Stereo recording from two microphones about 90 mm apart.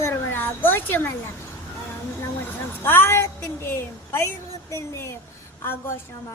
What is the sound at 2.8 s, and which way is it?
A woman's voice, 25° left (ahead or behind).